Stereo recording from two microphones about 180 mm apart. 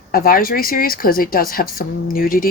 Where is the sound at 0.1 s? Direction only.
50° left (ahead or behind).